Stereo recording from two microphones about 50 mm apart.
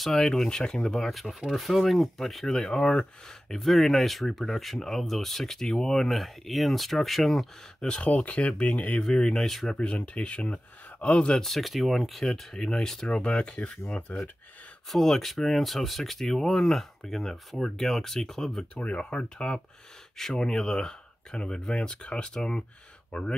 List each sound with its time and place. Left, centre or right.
0.0 s speech: centre
1.5 s speech: centre
8.0 s speech: left
9.0 s speech: centre
9.7 s speech: left
11.4 s speech: centre; by 14.1 s left
14.9 s speech: centre
18.8 s speech: left